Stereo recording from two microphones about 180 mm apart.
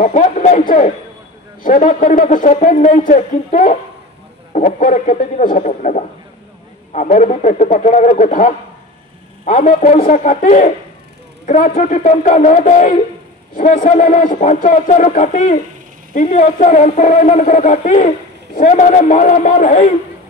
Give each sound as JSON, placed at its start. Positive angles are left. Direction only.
{"t": 0.0, "sound": "speech", "side_deg": 45}